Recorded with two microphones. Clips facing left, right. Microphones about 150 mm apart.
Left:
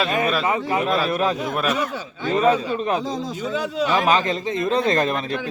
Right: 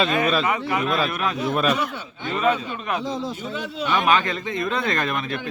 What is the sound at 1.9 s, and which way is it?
A man's voice, 40° left (ahead or behind).